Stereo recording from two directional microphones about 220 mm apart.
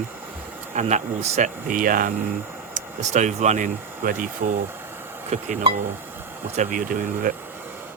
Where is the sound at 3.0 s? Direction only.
30° right (ahead or behind).